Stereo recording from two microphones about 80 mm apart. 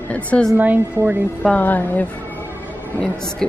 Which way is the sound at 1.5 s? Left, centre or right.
Left.